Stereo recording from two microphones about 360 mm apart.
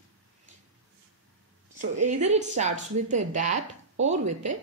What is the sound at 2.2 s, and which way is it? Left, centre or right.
Speech, centre.